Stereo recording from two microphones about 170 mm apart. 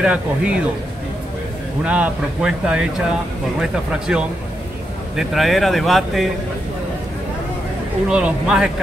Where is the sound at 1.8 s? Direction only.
5° right (ahead or behind).